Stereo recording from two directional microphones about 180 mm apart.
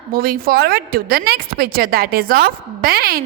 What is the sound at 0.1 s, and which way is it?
A woman's voice, 55° right (ahead or behind).